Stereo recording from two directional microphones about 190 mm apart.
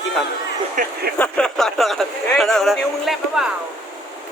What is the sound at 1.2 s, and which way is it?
Speech, 5° left (ahead or behind).